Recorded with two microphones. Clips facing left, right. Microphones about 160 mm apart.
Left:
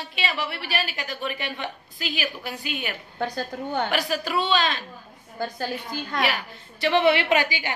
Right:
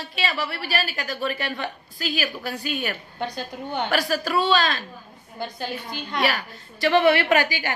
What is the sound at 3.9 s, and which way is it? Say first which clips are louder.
Speech: right 2 dB; 20° left (ahead or behind).